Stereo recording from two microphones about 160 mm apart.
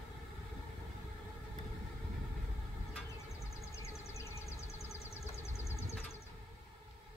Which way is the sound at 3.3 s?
20° left (ahead or behind).